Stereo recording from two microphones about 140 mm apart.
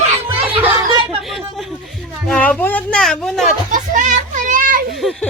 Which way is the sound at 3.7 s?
70° right (ahead or behind).